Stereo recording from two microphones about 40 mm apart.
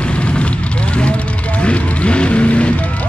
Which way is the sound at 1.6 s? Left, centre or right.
Left.